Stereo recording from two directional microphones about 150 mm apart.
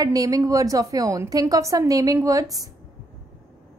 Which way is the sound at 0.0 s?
25° right (ahead or behind).